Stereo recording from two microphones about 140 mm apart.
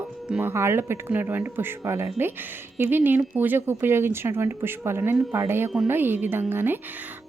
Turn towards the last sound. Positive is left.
turn(degrees=-15)  # may be behind; listen again after turning